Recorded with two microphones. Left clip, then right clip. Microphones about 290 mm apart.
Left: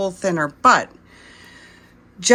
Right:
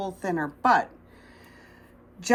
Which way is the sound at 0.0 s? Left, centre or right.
Centre.